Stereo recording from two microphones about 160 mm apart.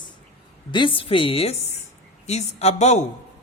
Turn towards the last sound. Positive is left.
turn(degrees=45)  # may be behind; listen again after turning